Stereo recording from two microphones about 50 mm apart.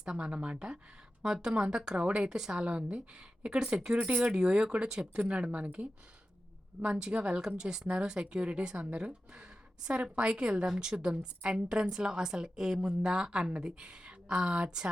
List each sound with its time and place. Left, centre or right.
0.0 s a woman's voice: centre
2.6 s speech: right
7.4 s a woman's voice: centre